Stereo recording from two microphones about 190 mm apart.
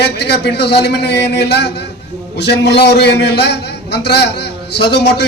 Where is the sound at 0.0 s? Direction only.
60° left (ahead or behind).